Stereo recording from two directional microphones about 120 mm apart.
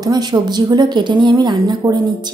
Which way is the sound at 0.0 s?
35° right (ahead or behind).